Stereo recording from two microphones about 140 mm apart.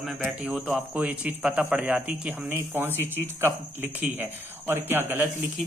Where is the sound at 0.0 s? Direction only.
5° right (ahead or behind).